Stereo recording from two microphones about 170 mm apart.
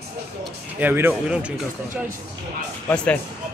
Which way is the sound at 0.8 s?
10° right (ahead or behind).